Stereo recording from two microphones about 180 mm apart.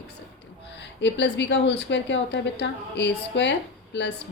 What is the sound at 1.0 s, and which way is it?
A woman's voice, 75° left (ahead or behind).